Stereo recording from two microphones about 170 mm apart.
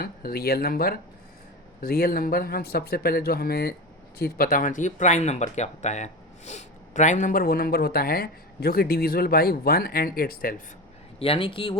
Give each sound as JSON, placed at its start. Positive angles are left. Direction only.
{"t": 0.0, "sound": "speech", "side_deg": 60}
{"t": 11.2, "sound": "speech", "side_deg": 35}